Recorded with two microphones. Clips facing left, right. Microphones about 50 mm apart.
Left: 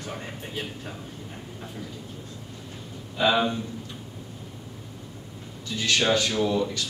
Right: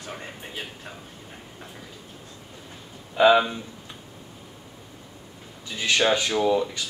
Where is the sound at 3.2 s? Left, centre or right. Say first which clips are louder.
Right 5 dB; centre.